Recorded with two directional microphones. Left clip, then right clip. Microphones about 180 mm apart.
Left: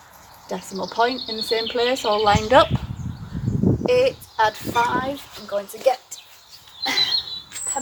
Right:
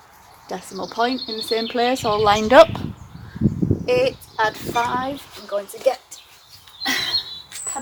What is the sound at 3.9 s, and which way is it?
Speech, 35° right (ahead or behind).